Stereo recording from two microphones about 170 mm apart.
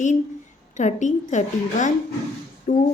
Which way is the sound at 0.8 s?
45° left (ahead or behind).